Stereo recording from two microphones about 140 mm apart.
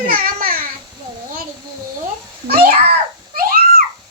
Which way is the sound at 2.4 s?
90° right.